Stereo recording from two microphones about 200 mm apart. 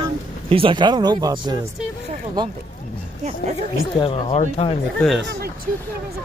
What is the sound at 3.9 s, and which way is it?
Speech, 25° left (ahead or behind).